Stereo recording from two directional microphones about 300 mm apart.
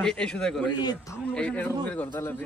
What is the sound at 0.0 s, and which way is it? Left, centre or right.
A man's voice, centre.